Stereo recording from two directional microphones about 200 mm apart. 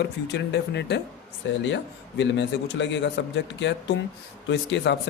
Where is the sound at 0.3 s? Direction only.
60° left (ahead or behind).